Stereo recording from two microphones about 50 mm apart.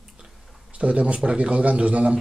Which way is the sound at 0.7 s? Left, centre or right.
Right.